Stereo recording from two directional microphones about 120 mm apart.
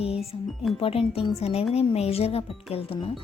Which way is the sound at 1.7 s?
60° left (ahead or behind).